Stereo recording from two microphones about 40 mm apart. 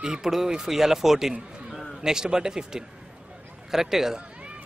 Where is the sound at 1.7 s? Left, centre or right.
Centre.